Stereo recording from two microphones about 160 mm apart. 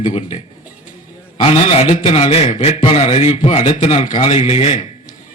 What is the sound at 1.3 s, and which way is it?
A man's voice, 35° left (ahead or behind).